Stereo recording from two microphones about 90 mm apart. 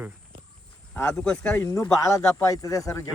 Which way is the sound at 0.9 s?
30° left (ahead or behind).